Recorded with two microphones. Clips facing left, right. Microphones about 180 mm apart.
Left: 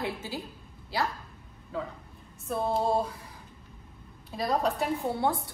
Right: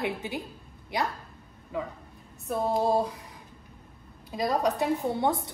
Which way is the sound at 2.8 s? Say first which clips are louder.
Right 2 dB; 20° right (ahead or behind).